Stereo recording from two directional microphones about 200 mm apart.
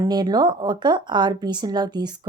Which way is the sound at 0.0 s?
20° right (ahead or behind).